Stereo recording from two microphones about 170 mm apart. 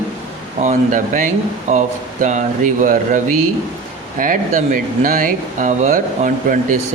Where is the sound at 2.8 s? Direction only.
50° right (ahead or behind).